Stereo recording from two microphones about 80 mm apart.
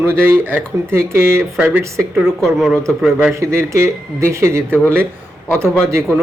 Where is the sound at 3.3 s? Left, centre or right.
Right.